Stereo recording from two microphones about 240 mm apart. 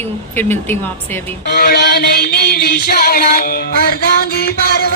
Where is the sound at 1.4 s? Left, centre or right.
Left.